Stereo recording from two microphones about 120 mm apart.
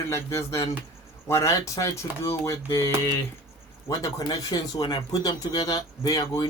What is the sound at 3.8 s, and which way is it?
Speech, 35° left (ahead or behind).